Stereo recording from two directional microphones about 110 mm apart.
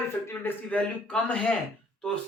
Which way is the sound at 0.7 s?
10° left (ahead or behind).